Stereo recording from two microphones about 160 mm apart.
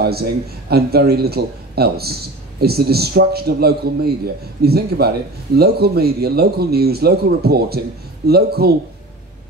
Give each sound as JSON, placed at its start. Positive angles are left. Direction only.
{"t": 0.0, "sound": "a man's voice", "side_deg": -80}